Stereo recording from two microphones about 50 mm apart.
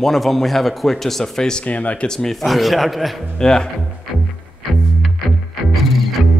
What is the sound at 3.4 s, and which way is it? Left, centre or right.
Speech, centre.